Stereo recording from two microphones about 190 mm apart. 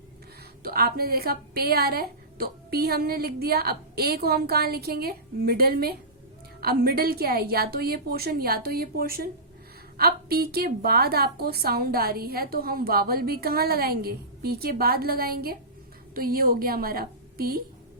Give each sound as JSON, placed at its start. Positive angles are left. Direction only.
{"t": 0.6, "sound": "a woman's voice", "side_deg": -55}